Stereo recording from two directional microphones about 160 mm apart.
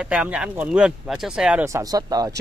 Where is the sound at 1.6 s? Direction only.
20° right (ahead or behind).